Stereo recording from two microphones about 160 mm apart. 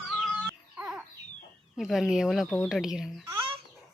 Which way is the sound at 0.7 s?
10° right (ahead or behind).